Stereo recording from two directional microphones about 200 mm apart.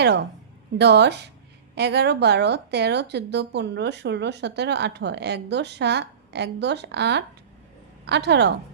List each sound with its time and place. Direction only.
0.0 s speech: 55° right (ahead or behind)